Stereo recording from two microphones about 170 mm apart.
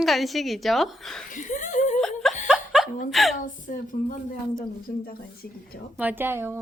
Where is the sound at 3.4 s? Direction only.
50° left (ahead or behind).